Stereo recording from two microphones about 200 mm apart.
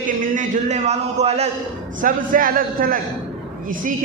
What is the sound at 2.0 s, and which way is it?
Speech, 45° right (ahead or behind).